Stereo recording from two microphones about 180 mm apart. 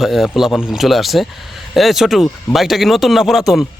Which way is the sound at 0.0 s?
Centre (ahead or behind).